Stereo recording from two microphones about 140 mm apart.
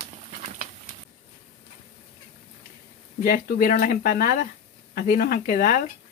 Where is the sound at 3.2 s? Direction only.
90° left; by 4.5 s 75° left (ahead or behind).